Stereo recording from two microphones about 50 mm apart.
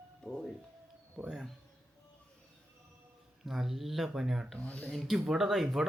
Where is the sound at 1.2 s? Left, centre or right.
Centre.